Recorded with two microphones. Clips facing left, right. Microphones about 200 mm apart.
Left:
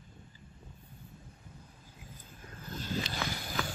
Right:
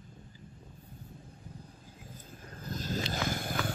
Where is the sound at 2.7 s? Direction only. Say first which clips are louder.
Right 2 dB; 40° right (ahead or behind).